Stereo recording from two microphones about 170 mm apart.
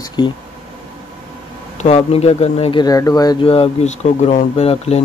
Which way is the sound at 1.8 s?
40° left (ahead or behind).